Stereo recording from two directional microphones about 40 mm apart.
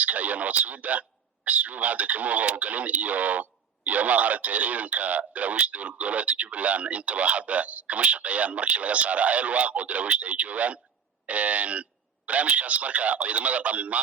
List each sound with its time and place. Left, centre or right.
0.0 s speech: right